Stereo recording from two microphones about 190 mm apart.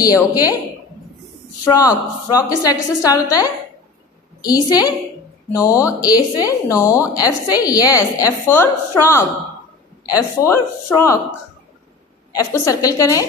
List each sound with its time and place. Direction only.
0.0 s a woman's voice: 20° left (ahead or behind)
1.6 s a woman's voice: 15° left (ahead or behind)
4.4 s a woman's voice: 20° left (ahead or behind)
12.4 s a woman's voice: 15° left (ahead or behind)